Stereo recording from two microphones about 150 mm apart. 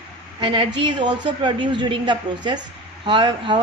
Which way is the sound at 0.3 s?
35° right (ahead or behind).